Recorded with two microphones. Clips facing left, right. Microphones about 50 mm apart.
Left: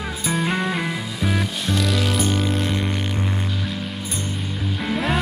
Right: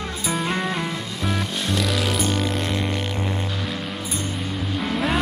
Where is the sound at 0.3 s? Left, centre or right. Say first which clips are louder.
Left 2 dB; centre.